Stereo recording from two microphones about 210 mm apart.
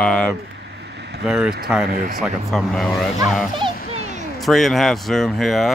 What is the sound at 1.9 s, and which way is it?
Speech, 45° right (ahead or behind).